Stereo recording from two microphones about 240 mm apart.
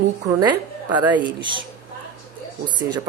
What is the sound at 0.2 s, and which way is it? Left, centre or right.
A woman's voice, centre.